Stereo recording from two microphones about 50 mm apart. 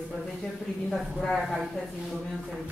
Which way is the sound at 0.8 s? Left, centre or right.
Centre.